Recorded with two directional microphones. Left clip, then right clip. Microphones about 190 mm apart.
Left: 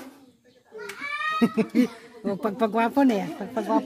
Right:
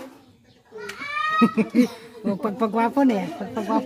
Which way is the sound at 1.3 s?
30° left (ahead or behind).